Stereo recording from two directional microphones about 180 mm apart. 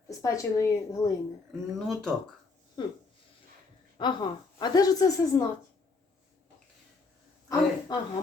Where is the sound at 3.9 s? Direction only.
25° left (ahead or behind).